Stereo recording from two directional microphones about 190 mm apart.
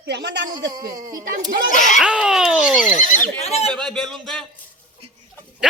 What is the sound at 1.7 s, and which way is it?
Speech, 40° left (ahead or behind).